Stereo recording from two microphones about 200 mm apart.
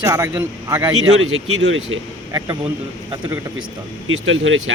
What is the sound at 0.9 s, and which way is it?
Speech, 90° right.